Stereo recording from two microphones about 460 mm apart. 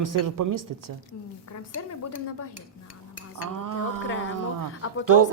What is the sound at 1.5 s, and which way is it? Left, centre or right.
Speech, left.